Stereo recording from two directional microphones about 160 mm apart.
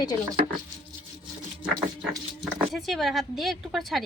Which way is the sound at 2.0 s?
5° right (ahead or behind).